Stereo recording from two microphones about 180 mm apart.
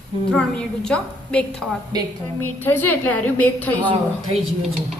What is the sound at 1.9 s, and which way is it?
Speech, 20° right (ahead or behind).